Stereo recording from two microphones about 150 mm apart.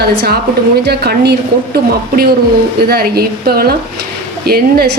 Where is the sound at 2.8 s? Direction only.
90° right.